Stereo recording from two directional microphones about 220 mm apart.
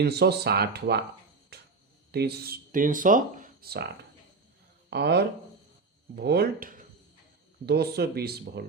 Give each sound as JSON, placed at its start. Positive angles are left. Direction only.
{"t": 0.0, "sound": "speech", "side_deg": -50}
{"t": 1.5, "sound": "cricket", "side_deg": -45}
{"t": 2.1, "sound": "speech", "side_deg": -45}
{"t": 4.9, "sound": "speech", "side_deg": -50}